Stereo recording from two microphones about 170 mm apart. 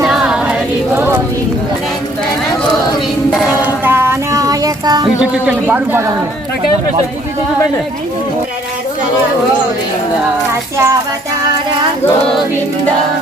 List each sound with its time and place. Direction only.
0.0 s choir: 5° right (ahead or behind)
0.9 s a sound: 10° right (ahead or behind)
3.3 s child singing: 5° right (ahead or behind); by 5.0 s 20° right (ahead or behind)
5.2 s speech: 5° right (ahead or behind)
10.5 s speech: 15° right (ahead or behind)